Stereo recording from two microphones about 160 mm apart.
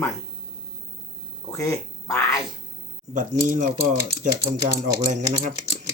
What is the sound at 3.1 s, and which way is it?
Speech, 55° right (ahead or behind).